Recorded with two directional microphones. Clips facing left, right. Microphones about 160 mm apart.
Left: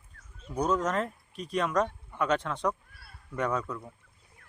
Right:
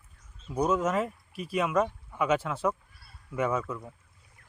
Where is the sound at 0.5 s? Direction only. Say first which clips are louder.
Right 2 dB; 10° right (ahead or behind).